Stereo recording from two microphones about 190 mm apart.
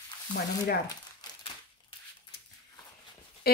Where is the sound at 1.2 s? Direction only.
20° left (ahead or behind).